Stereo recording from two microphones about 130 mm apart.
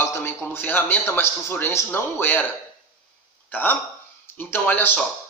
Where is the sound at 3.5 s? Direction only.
15° left (ahead or behind).